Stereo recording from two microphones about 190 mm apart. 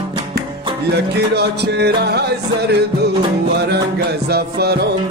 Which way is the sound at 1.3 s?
60° right (ahead or behind).